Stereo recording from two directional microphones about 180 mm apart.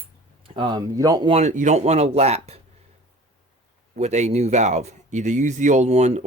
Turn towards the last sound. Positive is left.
turn(degrees=-40)  # may be behind; listen again after turning